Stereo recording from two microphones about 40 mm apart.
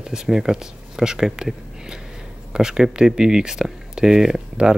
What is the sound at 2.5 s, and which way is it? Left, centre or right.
Speech, centre.